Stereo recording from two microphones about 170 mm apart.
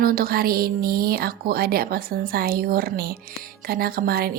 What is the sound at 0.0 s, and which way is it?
Speech, 60° right (ahead or behind).